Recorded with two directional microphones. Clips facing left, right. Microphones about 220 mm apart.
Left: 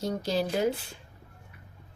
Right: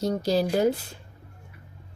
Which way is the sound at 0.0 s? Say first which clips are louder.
Right 5 dB; 35° right (ahead or behind).